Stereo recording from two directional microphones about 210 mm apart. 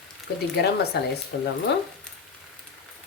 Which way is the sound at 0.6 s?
50° left (ahead or behind).